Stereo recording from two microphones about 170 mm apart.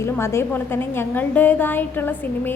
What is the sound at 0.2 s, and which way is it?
A woman's voice, 15° left (ahead or behind).